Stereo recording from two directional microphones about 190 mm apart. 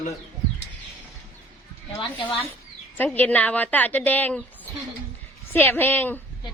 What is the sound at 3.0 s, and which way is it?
A woman's voice, 10° left (ahead or behind).